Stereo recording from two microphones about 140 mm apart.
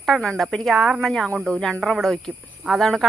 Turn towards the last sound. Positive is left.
turn(degrees=0)  # may be behind; listen again after turning